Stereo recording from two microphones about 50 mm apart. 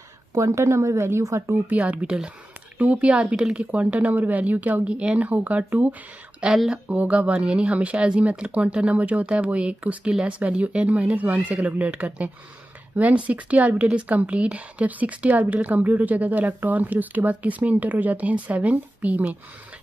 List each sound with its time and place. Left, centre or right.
0.3 s a woman's voice: right
1.7 s speech: right
3.3 s speech: centre
4.0 s speech: right
6.5 s speech: centre
6.9 s speech: right
12.9 s speech: right